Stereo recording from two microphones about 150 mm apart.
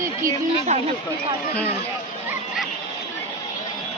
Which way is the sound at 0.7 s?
50° right (ahead or behind).